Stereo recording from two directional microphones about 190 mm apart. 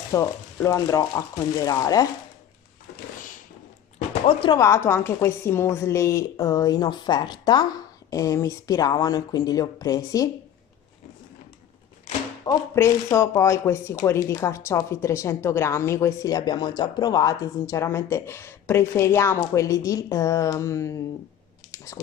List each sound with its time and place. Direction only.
0.1 s a woman's voice: 15° left (ahead or behind)
4.3 s a woman's voice: 25° left (ahead or behind)
12.4 s speech: 15° left (ahead or behind)
21.7 s a sound: 15° left (ahead or behind)